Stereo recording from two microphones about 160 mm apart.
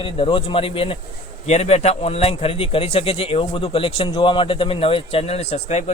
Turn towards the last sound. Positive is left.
turn(degrees=40)  # may be behind; listen again after turning